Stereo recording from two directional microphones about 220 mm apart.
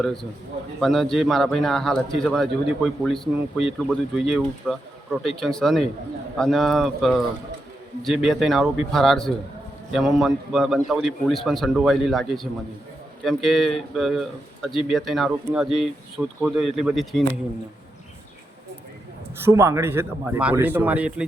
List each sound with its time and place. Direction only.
0.0 s speech: centre (ahead or behind)
19.4 s speech: 10° right (ahead or behind)